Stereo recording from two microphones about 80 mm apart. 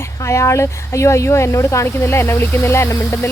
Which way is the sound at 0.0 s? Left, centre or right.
Left.